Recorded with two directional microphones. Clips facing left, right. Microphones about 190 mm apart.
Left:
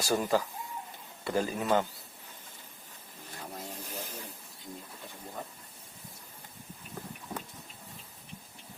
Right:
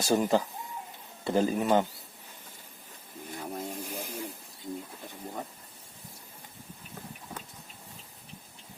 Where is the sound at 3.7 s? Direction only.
10° right (ahead or behind).